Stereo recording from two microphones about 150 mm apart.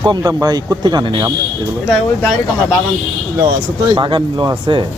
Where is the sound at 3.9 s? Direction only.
30° right (ahead or behind).